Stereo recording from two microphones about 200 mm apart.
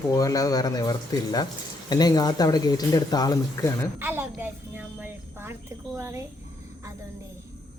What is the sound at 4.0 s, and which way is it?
Speech, 10° right (ahead or behind).